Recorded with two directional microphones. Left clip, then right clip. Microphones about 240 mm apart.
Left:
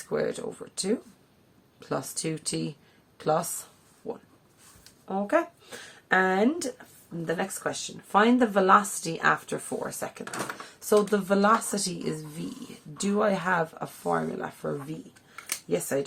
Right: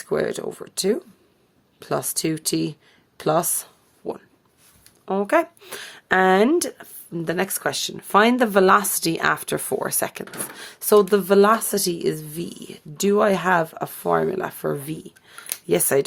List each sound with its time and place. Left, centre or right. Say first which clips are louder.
0.1 s speech: right 6 dB; right
5.0 s speech: right 6 dB; right